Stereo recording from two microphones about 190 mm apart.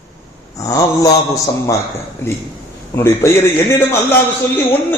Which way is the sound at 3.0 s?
15° left (ahead or behind).